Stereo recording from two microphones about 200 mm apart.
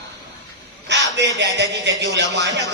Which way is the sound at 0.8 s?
60° right (ahead or behind).